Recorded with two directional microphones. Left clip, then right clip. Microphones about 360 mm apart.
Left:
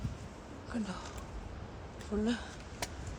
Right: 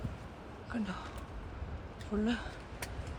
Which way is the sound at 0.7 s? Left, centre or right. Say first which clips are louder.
Even; centre.